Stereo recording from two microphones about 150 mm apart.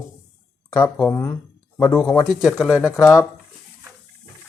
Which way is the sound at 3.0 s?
20° left (ahead or behind).